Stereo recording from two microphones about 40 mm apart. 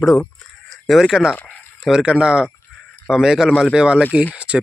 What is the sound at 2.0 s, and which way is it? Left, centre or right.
A man's voice, right.